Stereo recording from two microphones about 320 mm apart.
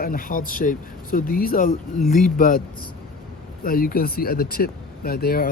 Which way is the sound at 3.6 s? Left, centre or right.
Left.